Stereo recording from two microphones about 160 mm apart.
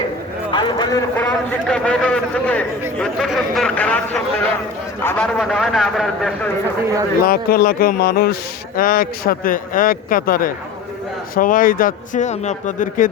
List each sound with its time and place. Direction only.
0.5 s a man's voice: 30° left (ahead or behind)
1.1 s a man's voice: 5° left (ahead or behind)
5.4 s speech: centre (ahead or behind)
7.3 s speech: 65° left (ahead or behind)